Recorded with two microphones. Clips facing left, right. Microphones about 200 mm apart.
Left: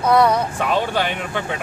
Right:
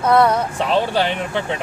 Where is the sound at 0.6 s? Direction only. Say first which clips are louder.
Right 2 dB; 30° right (ahead or behind).